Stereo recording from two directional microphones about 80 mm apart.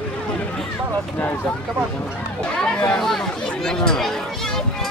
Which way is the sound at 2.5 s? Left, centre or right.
Centre.